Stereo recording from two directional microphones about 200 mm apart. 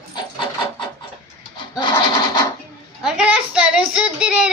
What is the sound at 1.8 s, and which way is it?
Scratch, 20° left (ahead or behind).